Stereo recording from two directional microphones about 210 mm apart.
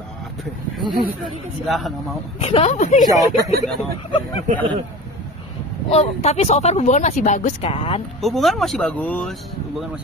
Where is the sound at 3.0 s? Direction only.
15° right (ahead or behind).